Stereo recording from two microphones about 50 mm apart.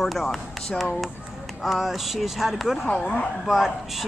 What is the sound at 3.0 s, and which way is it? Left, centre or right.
Speech, left.